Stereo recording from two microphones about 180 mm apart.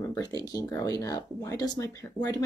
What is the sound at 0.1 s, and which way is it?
Speech, 20° left (ahead or behind).